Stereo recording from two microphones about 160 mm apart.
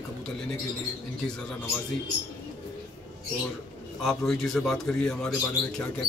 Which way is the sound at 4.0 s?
Centre (ahead or behind).